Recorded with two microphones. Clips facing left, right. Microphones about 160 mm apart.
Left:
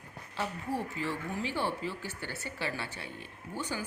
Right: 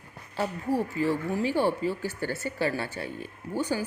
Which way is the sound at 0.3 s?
40° right (ahead or behind).